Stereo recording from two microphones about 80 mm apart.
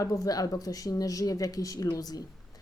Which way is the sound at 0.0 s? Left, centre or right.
Left.